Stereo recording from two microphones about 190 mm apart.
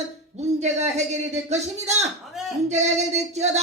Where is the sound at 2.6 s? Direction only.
35° right (ahead or behind).